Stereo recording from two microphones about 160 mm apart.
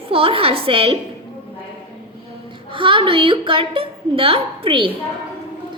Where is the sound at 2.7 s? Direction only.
30° right (ahead or behind).